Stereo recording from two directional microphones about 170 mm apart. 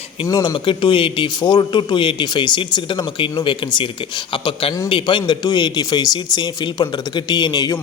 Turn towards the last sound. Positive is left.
turn(degrees=25)  # may be behind; listen again after turning